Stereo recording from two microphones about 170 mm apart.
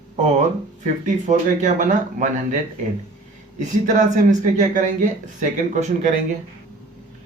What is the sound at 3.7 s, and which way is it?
A man's voice, 50° right (ahead or behind).